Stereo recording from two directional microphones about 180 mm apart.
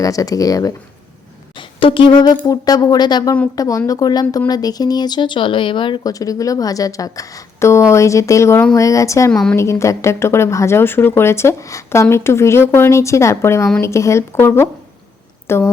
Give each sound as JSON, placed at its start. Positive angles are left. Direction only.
{"t": 0.0, "sound": "speech", "side_deg": 20}
{"t": 9.3, "sound": "a woman's voice", "side_deg": 5}
{"t": 9.6, "sound": "speech", "side_deg": 15}